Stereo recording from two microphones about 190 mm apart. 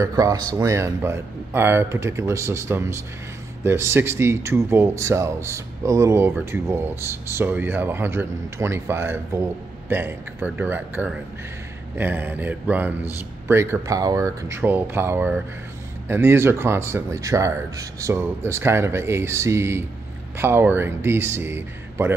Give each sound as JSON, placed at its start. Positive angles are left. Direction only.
{"t": 0.0, "sound": "speech", "side_deg": -20}